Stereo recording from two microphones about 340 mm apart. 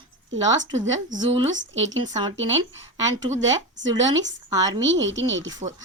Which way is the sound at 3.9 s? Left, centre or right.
Centre.